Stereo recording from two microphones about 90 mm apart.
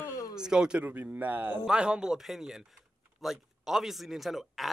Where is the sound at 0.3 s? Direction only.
5° right (ahead or behind).